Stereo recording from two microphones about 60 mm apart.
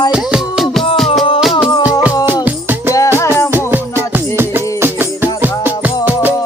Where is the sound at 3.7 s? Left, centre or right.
Right.